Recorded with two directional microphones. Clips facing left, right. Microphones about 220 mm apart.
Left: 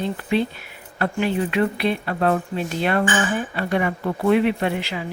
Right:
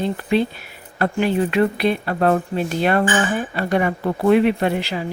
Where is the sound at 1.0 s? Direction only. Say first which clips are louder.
Right 3 dB; 40° right (ahead or behind).